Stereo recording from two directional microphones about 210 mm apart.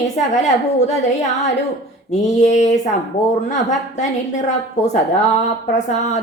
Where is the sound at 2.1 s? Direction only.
35° left (ahead or behind).